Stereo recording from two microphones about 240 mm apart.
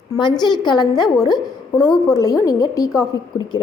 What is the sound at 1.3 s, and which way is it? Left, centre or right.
Speech, centre.